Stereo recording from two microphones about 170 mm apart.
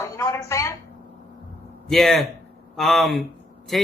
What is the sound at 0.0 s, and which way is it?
Speech, 20° left (ahead or behind).